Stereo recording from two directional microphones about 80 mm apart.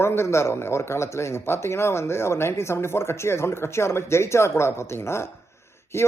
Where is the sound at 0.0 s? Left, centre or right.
Left.